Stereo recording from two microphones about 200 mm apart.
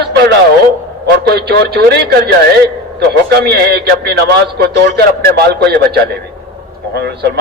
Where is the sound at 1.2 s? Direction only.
55° right (ahead or behind).